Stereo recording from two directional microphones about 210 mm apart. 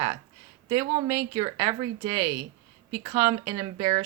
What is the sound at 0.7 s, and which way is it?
Speech, 15° right (ahead or behind).